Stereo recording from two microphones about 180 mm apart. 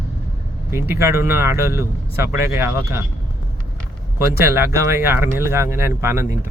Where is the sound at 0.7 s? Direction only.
15° right (ahead or behind).